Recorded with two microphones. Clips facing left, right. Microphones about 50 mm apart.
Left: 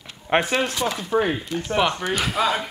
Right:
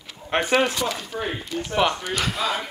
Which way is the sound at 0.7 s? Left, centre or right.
Left.